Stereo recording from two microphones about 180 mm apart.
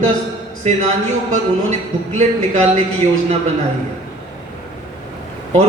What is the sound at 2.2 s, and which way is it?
Speech, 40° right (ahead or behind).